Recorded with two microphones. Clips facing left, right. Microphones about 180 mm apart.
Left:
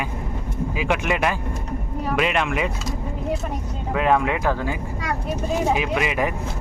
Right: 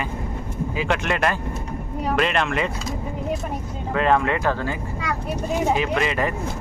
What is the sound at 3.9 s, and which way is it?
Speech, 10° left (ahead or behind).